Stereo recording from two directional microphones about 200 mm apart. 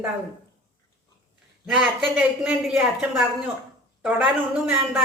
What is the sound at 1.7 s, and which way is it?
A man's voice, 5° right (ahead or behind).